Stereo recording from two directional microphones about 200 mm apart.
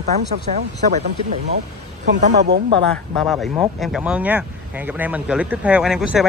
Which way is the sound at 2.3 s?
55° right (ahead or behind).